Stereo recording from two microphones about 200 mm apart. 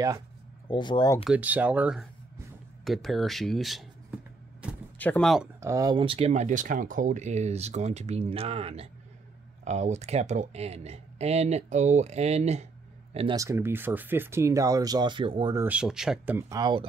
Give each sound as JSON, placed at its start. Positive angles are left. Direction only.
{"t": 0.7, "sound": "speech", "side_deg": 20}
{"t": 1.2, "sound": "speech", "side_deg": -5}
{"t": 4.9, "sound": "speech", "side_deg": 10}
{"t": 5.6, "sound": "speech", "side_deg": -15}
{"t": 13.4, "sound": "speech", "side_deg": -15}
{"t": 15.6, "sound": "speech", "side_deg": -5}
{"t": 16.3, "sound": "speech", "side_deg": -15}